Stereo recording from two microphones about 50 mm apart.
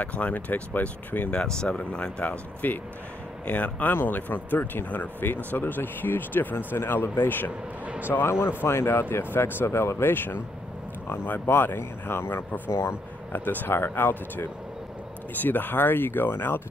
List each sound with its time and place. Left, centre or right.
0.0 s speech: left
1.3 s speech: centre
2.6 s speech: left
3.9 s speech: left
7.8 s vehicle: right
8.1 s speech: left
13.3 s speech: left